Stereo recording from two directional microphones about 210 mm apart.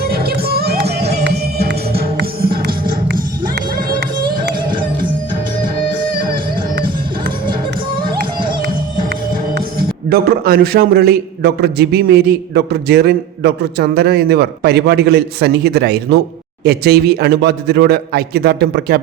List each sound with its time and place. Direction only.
0.0 s music: 45° right (ahead or behind)
9.6 s a man's voice: 45° right (ahead or behind)